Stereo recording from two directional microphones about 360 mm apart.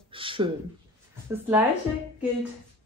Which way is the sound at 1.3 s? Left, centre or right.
Centre.